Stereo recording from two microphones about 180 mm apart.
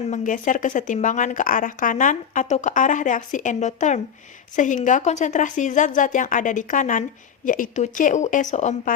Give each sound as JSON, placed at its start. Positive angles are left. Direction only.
{"t": 0.1, "sound": "a woman's voice", "side_deg": 45}